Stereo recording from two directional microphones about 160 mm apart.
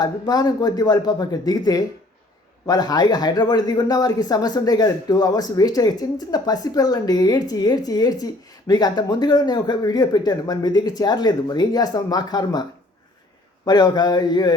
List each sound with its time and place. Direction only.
0.0 s speech: 25° left (ahead or behind)
13.7 s speech: 25° left (ahead or behind)